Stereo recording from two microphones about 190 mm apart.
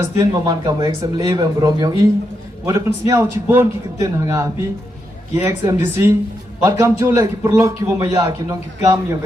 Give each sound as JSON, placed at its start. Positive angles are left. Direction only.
{"t": 0.0, "sound": "a man's voice", "side_deg": -20}